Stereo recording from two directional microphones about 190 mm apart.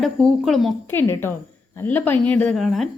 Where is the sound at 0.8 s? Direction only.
10° left (ahead or behind).